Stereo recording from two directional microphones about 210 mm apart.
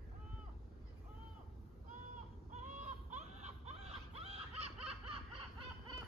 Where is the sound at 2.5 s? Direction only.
35° right (ahead or behind).